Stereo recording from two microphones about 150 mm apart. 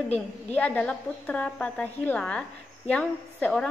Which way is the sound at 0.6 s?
10° left (ahead or behind).